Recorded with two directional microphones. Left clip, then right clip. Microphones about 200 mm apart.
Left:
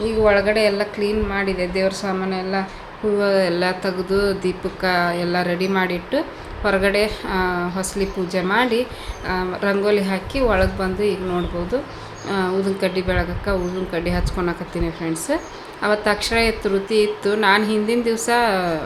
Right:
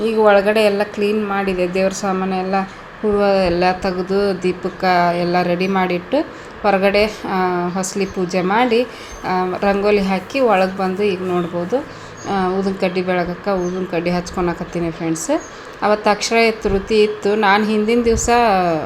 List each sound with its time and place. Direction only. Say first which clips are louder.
0.0 s speech: right 4 dB; 20° right (ahead or behind)
12.3 s speech: right 2 dB; 10° right (ahead or behind)